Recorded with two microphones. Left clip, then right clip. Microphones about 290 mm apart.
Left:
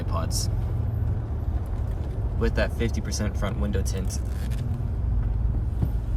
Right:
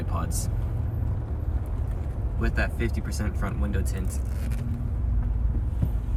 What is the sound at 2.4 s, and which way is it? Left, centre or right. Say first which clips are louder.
Speech: left 3 dB; centre.